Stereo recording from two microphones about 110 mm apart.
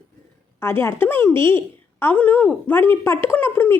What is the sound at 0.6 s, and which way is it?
A woman's voice, 20° left (ahead or behind).